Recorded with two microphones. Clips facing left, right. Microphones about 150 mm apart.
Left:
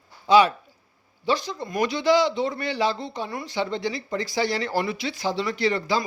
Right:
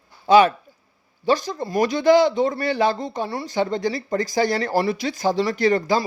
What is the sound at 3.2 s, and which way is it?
Speech, 30° right (ahead or behind).